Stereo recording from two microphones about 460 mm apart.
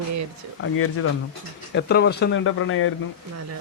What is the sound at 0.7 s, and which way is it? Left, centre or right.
Speech, left.